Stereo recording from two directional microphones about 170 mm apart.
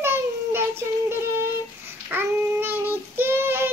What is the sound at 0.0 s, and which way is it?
Child singing, 15° right (ahead or behind).